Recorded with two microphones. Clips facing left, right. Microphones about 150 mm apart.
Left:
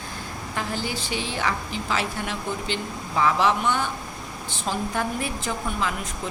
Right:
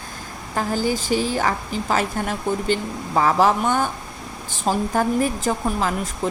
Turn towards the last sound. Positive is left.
turn(degrees=-40)  # may be behind; listen again after turning